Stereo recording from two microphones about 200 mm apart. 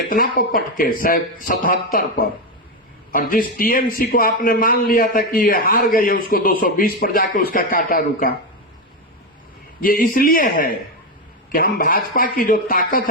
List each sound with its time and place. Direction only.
0.1 s a man's voice: 45° left (ahead or behind)
9.8 s a man's voice: 45° left (ahead or behind)